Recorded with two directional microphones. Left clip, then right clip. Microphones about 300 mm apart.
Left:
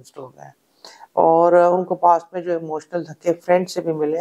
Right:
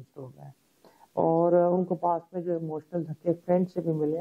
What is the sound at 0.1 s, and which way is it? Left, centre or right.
Speech, centre.